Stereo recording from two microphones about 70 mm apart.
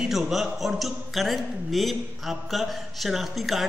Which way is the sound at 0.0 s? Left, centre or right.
Centre.